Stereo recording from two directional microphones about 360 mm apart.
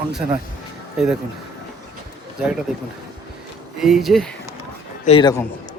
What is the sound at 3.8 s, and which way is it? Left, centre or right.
Speech, centre.